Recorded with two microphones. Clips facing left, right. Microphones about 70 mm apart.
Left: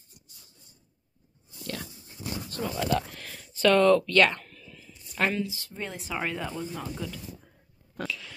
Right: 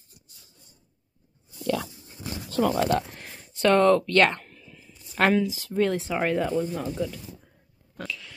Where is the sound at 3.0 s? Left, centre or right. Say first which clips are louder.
Right 2 dB; right.